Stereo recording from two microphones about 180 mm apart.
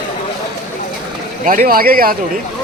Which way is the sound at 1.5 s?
55° right (ahead or behind).